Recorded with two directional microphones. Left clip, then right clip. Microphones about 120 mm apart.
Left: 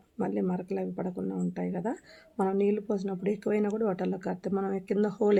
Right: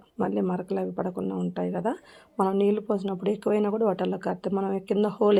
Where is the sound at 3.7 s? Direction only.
5° right (ahead or behind).